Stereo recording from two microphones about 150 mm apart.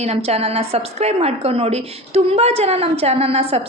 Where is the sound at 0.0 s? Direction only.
45° right (ahead or behind).